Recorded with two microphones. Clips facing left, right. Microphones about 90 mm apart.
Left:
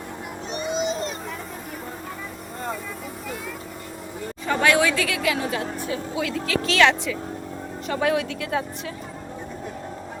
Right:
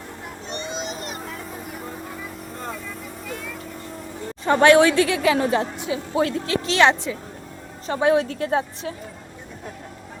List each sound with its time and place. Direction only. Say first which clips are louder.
4.4 s a woman's voice: right 6 dB; 35° right (ahead or behind)